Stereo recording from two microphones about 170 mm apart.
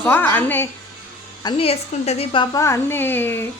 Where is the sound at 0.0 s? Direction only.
10° left (ahead or behind).